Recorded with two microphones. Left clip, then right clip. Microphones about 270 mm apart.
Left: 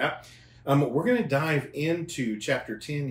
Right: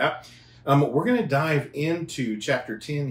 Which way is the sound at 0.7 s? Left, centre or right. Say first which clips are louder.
Right 3 dB; centre.